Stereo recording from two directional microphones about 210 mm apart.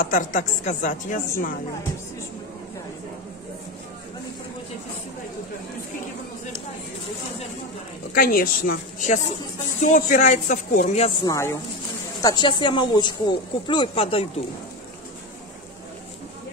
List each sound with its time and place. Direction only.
0.0 s speech: 40° left (ahead or behind)
8.1 s a woman's voice: 45° left (ahead or behind)
11.2 s speech: 15° left (ahead or behind)